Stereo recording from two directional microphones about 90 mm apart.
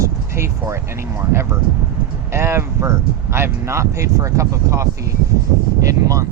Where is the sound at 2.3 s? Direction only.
30° right (ahead or behind).